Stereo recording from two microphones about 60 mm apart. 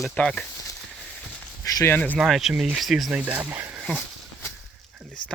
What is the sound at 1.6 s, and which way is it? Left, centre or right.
Speech, left.